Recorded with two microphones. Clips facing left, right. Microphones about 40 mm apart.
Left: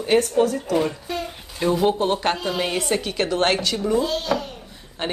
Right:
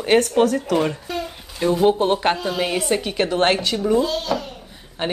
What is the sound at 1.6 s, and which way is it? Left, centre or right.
Speech, centre.